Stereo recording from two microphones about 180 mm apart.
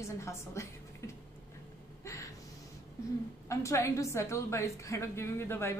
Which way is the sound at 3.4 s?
15° left (ahead or behind).